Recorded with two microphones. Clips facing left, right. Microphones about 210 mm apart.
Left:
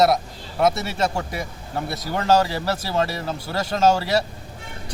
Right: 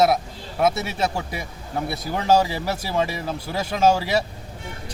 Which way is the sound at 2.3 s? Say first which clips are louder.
Even; 10° right (ahead or behind).